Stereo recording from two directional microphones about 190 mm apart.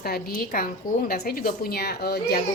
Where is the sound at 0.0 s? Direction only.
50° left (ahead or behind).